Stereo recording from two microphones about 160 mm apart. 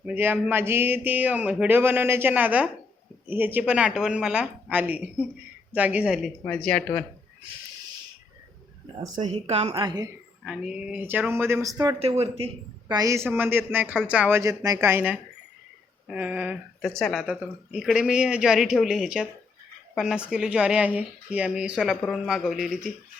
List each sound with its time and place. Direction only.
0.0 s speech: 10° right (ahead or behind)
6.4 s speech: 5° left (ahead or behind)
9.2 s a woman's voice: 45° right (ahead or behind)
9.8 s speech: 25° right (ahead or behind)
10.4 s speech: 5° right (ahead or behind); by 11.9 s 20° right (ahead or behind)
11.9 s speech: 40° right (ahead or behind)
12.9 s speech: 20° right (ahead or behind); by 22.9 s centre (ahead or behind)